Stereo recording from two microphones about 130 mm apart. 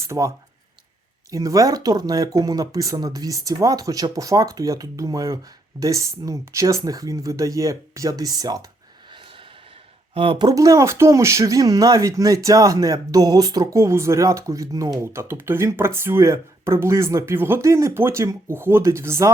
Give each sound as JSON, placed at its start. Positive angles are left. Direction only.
{"t": 0.1, "sound": "speech", "side_deg": -20}
{"t": 1.3, "sound": "speech", "side_deg": -25}
{"t": 9.1, "sound": "a sound", "side_deg": -40}
{"t": 10.2, "sound": "speech", "side_deg": -40}